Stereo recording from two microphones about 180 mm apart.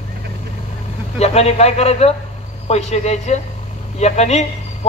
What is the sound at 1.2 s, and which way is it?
Speech, 35° left (ahead or behind).